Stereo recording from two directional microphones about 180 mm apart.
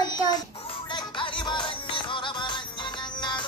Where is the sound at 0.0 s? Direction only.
25° left (ahead or behind).